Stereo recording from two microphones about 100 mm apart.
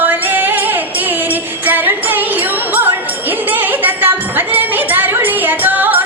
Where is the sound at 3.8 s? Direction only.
20° right (ahead or behind).